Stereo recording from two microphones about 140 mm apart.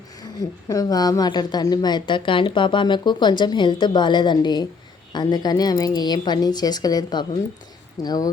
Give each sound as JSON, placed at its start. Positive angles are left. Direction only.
{"t": 0.2, "sound": "a woman's voice", "side_deg": 25}